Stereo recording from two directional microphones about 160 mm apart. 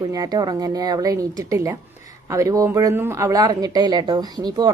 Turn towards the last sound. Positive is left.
turn(degrees=-25)  # may be behind; listen again after turning